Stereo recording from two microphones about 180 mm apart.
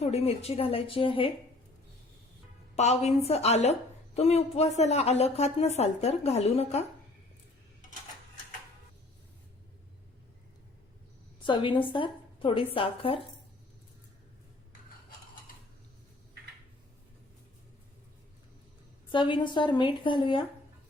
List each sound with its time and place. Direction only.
0.0 s a woman's voice: 35° left (ahead or behind)
2.7 s a woman's voice: 40° left (ahead or behind)
11.4 s a woman's voice: 25° left (ahead or behind)
19.1 s a woman's voice: 25° left (ahead or behind)